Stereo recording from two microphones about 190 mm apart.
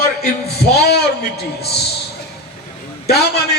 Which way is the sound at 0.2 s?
55° left (ahead or behind).